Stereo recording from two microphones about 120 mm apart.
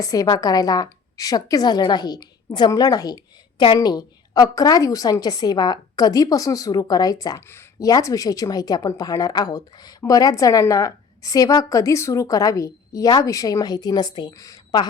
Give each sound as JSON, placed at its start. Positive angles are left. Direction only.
{"t": 0.0, "sound": "a woman's voice", "side_deg": 30}
{"t": 7.4, "sound": "speech", "side_deg": 20}